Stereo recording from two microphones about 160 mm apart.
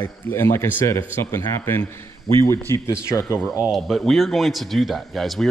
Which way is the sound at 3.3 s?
10° right (ahead or behind).